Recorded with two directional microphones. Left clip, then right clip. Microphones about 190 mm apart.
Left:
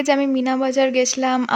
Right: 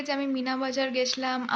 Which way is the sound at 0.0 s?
45° left (ahead or behind).